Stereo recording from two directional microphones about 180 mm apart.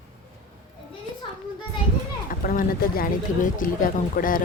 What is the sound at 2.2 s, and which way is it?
Speech, 50° left (ahead or behind).